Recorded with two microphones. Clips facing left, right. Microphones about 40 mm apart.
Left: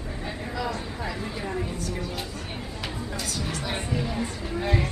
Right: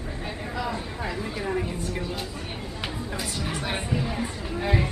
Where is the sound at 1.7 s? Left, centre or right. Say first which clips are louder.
Right 1 dB; right.